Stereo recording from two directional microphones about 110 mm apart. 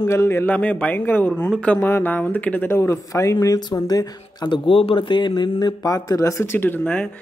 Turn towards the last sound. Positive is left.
turn(degrees=10)  # may be behind; listen again after turning